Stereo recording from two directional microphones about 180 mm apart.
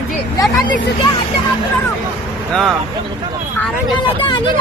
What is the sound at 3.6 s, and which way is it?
Speech, 5° left (ahead or behind).